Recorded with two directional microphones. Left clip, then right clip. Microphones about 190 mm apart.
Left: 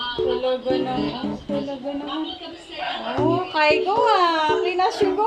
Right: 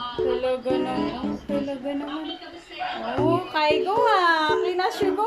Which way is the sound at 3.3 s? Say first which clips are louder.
Left 4 dB; centre (ahead or behind).